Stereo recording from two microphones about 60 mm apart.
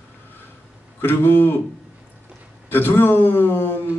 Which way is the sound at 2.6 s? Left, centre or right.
Left.